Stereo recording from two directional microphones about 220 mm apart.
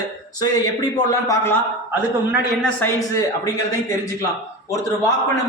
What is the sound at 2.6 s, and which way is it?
Speech, 10° left (ahead or behind).